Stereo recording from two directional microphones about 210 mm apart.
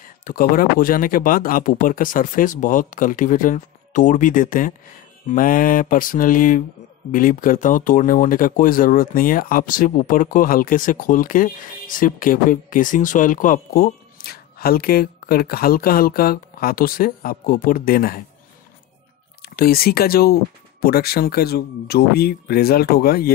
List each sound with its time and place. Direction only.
0.2 s speech: 40° left (ahead or behind)
19.4 s speech: 45° left (ahead or behind)